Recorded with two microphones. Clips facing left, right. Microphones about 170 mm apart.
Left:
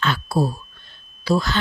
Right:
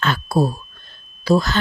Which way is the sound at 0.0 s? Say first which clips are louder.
Right 2 dB; 45° right (ahead or behind).